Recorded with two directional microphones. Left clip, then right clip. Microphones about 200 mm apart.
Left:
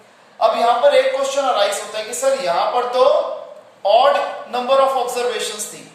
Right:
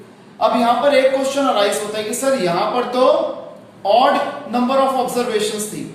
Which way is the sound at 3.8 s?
20° left (ahead or behind).